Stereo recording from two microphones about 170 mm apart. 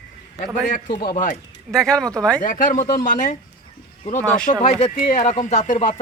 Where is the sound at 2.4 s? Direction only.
50° left (ahead or behind).